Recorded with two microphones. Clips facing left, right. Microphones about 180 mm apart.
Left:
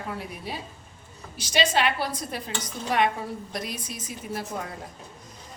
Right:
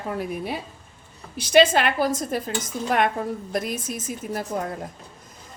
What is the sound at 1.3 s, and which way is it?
A woman's voice, 55° right (ahead or behind).